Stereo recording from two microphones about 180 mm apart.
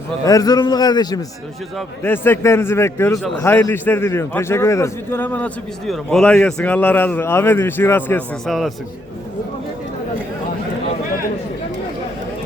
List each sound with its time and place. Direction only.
0.3 s a man's voice: 20° left (ahead or behind)
2.0 s a man's voice: 10° left (ahead or behind)